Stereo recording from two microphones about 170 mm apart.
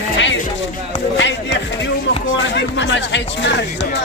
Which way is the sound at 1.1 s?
90° left.